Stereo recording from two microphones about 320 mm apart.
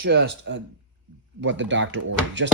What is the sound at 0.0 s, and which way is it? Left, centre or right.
Speech, right.